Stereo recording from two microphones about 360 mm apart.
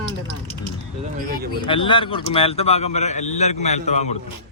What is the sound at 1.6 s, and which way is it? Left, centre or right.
A man's voice, centre.